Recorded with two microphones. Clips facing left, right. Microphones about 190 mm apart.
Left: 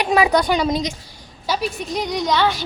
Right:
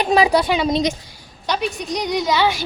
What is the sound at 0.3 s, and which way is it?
A woman's voice, 5° right (ahead or behind).